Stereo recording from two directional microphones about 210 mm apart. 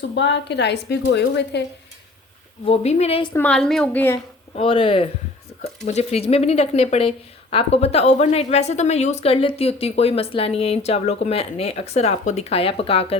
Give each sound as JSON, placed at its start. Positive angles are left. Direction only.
{"t": 0.1, "sound": "a woman's voice", "side_deg": 60}
{"t": 2.6, "sound": "a woman's voice", "side_deg": 30}
{"t": 3.3, "sound": "a woman's voice", "side_deg": 5}
{"t": 4.5, "sound": "a woman's voice", "side_deg": 25}